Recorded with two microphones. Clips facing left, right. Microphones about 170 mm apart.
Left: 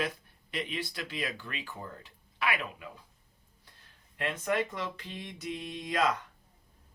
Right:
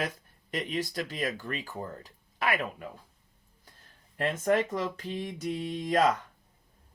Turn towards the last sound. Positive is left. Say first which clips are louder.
# right 6 dB
turn(degrees=-40)  # may be behind; listen again after turning